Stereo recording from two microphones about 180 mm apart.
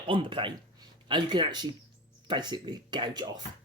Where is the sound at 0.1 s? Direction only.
30° right (ahead or behind).